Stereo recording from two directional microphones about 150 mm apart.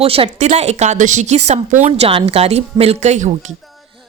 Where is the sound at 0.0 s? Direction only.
40° right (ahead or behind).